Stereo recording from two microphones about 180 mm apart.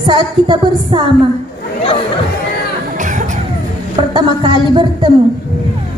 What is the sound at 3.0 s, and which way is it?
Music, 45° right (ahead or behind).